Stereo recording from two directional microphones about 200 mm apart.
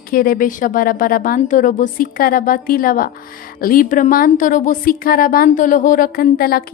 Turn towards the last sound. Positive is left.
turn(degrees=50)  # may be behind; listen again after turning